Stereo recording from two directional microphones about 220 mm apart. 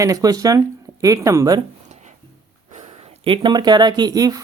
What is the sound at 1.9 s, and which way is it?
Music, 30° right (ahead or behind).